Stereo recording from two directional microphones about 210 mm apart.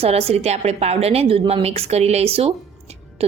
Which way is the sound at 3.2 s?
30° right (ahead or behind).